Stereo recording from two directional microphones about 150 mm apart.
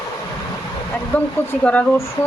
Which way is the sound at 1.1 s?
10° left (ahead or behind).